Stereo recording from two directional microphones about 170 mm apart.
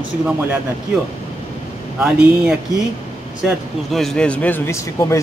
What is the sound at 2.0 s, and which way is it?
Speech, 10° right (ahead or behind).